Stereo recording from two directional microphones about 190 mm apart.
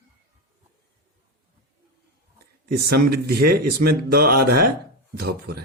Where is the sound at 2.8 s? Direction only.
55° right (ahead or behind).